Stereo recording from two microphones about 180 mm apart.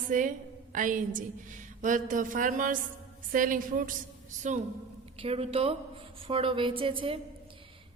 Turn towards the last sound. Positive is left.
turn(degrees=-30)  # may be behind; listen again after turning